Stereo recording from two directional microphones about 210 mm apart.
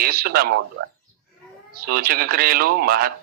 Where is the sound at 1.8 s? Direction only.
45° right (ahead or behind).